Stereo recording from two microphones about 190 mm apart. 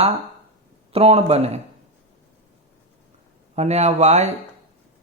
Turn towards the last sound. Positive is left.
turn(degrees=-35)  # may be behind; listen again after turning